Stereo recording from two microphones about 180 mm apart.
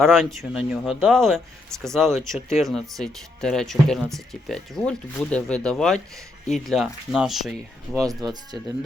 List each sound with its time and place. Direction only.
0.0 s speech: centre (ahead or behind)
8.0 s speech: 20° right (ahead or behind)